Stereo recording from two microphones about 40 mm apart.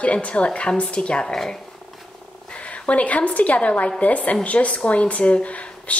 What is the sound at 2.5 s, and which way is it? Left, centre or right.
A woman's voice, left.